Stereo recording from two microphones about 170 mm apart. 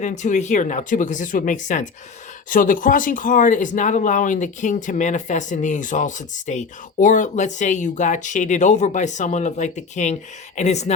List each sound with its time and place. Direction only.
0.0 s speech: 45° left (ahead or behind)